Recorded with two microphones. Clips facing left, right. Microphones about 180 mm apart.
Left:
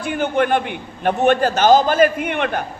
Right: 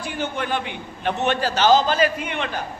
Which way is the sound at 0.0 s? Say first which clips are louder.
Left 8 dB; 55° left (ahead or behind).